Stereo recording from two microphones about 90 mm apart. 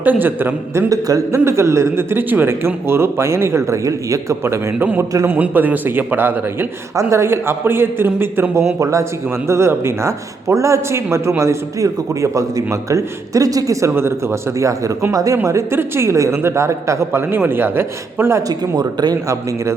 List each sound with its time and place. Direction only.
0.0 s a man's voice: 20° right (ahead or behind)
1.0 s speech: 40° right (ahead or behind)
1.5 s a man's voice: 30° right (ahead or behind)
8.8 s speech: 35° right (ahead or behind)
13.9 s a man's voice: 30° right (ahead or behind)
18.8 s a man's voice: 50° right (ahead or behind)